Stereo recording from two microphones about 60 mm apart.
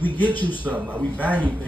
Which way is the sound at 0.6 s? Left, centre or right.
Right.